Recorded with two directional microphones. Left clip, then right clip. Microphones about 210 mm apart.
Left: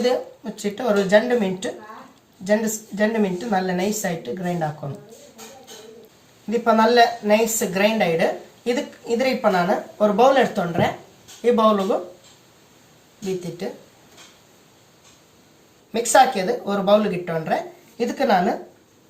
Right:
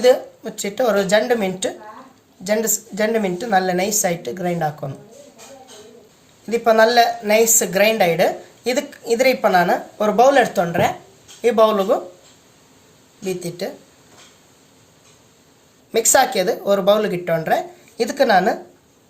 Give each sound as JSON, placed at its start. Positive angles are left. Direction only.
{"t": 0.6, "sound": "a woman's voice", "side_deg": -55}
{"t": 6.5, "sound": "a woman's voice", "side_deg": -60}
{"t": 15.9, "sound": "a woman's voice", "side_deg": -55}